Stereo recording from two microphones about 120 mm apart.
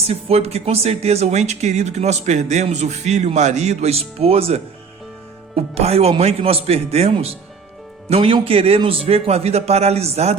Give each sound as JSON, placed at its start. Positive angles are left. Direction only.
{"t": 0.1, "sound": "speech", "side_deg": -60}